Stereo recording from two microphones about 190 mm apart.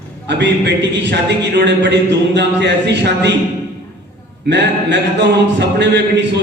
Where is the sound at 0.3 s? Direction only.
65° right (ahead or behind).